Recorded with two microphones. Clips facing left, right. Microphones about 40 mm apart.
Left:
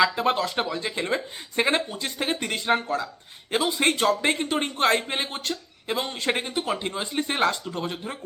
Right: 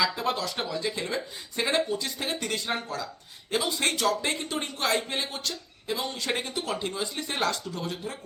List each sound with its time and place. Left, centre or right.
0.0 s speech: left